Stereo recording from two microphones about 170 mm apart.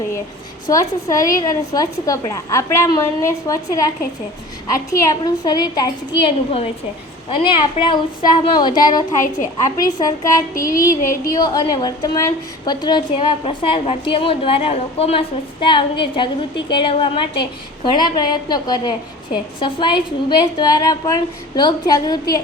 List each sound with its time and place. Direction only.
0.7 s a woman's voice: 20° left (ahead or behind)
7.3 s a woman's voice: 30° left (ahead or behind)